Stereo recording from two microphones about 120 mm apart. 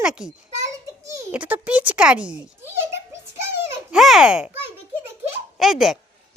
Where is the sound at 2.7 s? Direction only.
20° right (ahead or behind).